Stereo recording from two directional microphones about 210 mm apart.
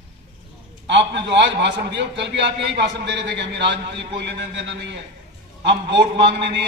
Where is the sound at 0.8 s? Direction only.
55° right (ahead or behind).